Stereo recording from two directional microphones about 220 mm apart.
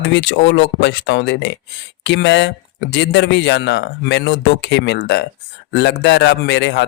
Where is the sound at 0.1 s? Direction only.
55° left (ahead or behind).